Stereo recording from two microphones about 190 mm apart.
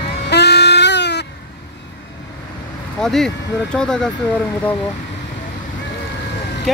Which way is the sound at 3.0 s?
Centre (ahead or behind).